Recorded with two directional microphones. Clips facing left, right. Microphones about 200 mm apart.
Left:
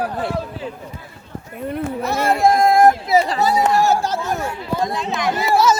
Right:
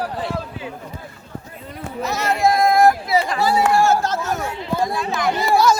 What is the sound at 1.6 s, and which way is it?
Speech, 60° left (ahead or behind).